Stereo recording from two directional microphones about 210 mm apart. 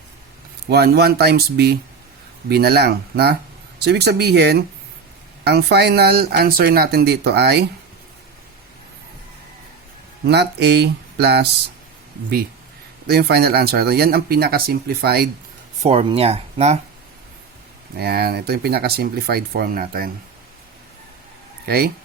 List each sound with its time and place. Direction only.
0.7 s speech: 50° right (ahead or behind)
10.2 s speech: 50° right (ahead or behind)
13.1 s speech: 50° right (ahead or behind)
15.8 s speech: 30° right (ahead or behind)
17.9 s speech: 50° right (ahead or behind)